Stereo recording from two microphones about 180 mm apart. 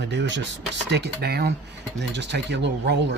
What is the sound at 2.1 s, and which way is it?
Speech, 75° right (ahead or behind).